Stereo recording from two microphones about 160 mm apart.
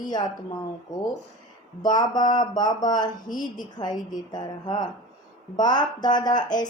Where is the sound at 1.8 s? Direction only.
25° left (ahead or behind).